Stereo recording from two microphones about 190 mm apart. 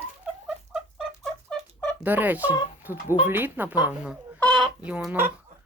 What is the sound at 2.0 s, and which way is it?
Speech, 10° right (ahead or behind).